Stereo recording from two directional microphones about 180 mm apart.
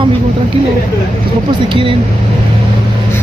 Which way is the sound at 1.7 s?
30° right (ahead or behind).